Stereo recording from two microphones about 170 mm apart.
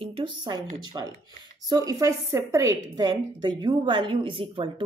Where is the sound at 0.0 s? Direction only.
30° right (ahead or behind).